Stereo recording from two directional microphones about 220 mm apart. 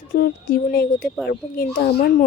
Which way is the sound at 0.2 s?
45° left (ahead or behind).